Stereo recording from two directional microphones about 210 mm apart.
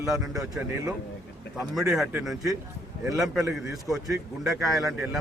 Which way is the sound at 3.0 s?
15° right (ahead or behind).